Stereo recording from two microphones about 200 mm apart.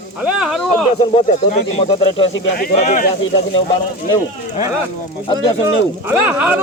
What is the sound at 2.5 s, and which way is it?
Speech, 45° left (ahead or behind).